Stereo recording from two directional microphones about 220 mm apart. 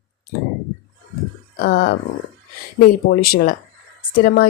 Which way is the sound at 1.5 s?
45° left (ahead or behind).